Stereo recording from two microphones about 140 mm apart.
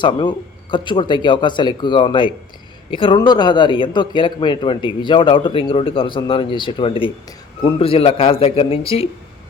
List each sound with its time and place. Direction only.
0.0 s speech: 35° left (ahead or behind)